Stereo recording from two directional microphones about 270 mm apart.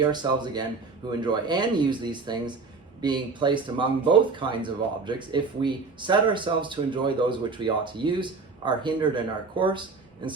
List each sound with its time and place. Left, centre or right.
0.1 s speech: centre